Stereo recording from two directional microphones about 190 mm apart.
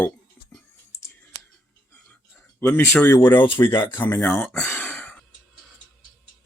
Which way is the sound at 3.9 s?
10° left (ahead or behind).